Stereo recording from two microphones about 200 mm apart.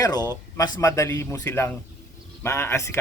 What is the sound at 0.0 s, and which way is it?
Speech, 20° left (ahead or behind).